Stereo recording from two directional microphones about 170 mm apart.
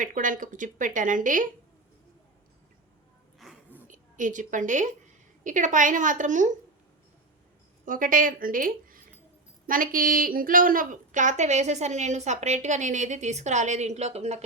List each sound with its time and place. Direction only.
0.0 s a woman's voice: 50° right (ahead or behind)
3.3 s a sound: centre (ahead or behind)
3.8 s a woman's voice: 50° right (ahead or behind)
7.9 s a woman's voice: 55° right (ahead or behind); by 14.4 s 40° right (ahead or behind)